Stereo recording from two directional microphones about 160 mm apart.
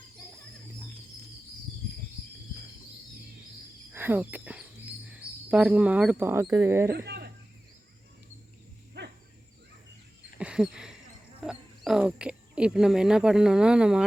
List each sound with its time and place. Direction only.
3.9 s speech: 10° right (ahead or behind)
6.9 s speech: 90° right
9.0 s dog: 90° right
10.3 s a sound: 5° right (ahead or behind)
11.4 s speech: 5° right (ahead or behind)